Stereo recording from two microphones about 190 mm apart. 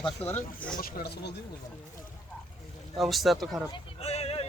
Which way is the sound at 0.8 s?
55° left (ahead or behind).